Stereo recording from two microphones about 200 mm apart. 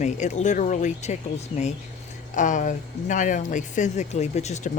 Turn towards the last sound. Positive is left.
turn(degrees=35)  # may be behind; listen again after turning